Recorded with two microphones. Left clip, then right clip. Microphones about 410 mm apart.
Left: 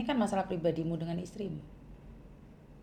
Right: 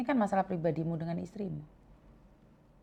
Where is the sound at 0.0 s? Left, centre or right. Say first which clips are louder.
Right 2 dB; right.